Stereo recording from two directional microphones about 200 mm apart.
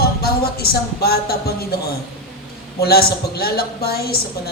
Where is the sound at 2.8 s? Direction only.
50° left (ahead or behind).